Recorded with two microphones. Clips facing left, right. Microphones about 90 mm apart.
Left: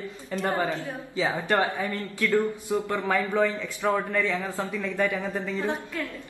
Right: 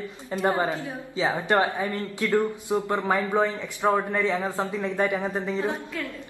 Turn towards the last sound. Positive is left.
turn(degrees=-20)  # may be behind; listen again after turning